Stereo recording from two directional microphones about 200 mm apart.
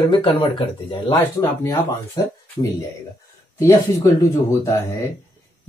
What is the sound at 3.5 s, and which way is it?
Speech, 15° left (ahead or behind).